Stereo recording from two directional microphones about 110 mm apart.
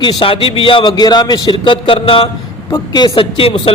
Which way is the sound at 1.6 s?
50° left (ahead or behind).